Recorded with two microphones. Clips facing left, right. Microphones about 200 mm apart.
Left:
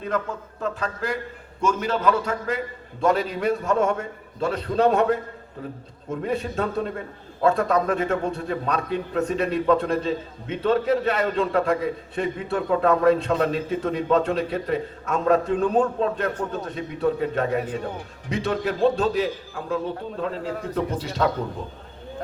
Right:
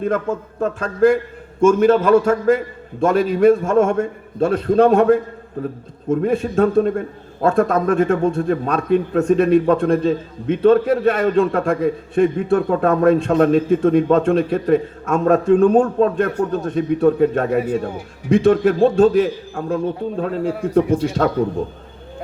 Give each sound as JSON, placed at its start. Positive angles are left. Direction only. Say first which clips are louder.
{"t": 0.0, "sound": "a man's voice", "louder": "right 7 dB", "side_deg": -50}
{"t": 17.6, "sound": "speech", "louder": "right 8 dB", "side_deg": -10}
{"t": 18.3, "sound": "a man's voice", "louder": "right 12 dB", "side_deg": -50}
{"t": 20.4, "sound": "speech", "louder": "right 8 dB", "side_deg": -10}
{"t": 21.2, "sound": "a man's voice", "louder": "even", "side_deg": -50}